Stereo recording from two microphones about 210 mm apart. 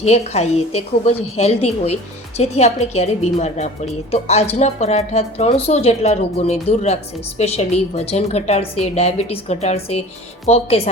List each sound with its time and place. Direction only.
0.0 s a woman's voice: 30° left (ahead or behind)